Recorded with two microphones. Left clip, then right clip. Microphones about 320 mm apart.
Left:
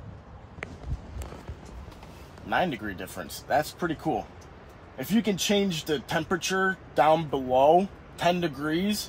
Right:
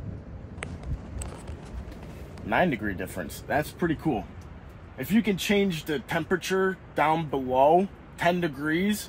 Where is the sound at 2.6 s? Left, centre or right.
Right.